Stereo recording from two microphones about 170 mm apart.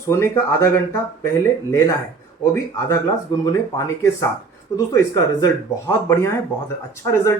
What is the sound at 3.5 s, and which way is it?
Speech, 20° left (ahead or behind).